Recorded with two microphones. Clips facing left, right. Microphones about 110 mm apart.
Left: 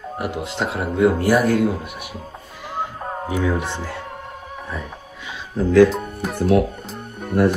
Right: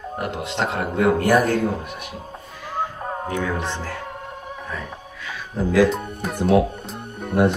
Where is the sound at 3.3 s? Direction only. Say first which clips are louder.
Left 4 dB; 15° left (ahead or behind).